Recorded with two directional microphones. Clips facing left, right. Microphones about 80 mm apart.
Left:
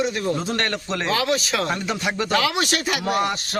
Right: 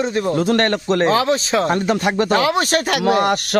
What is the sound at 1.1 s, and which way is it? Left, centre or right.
Speech, right.